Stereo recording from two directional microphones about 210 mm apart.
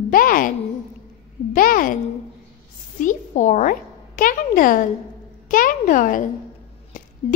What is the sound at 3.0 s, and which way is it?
Speech, 35° left (ahead or behind).